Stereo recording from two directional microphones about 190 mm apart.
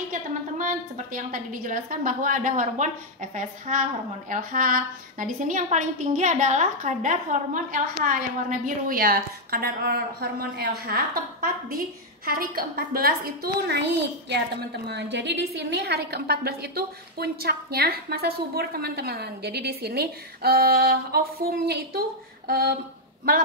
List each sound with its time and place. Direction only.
0.1 s a woman's voice: 45° right (ahead or behind)
12.3 s a woman's voice: 50° right (ahead or behind)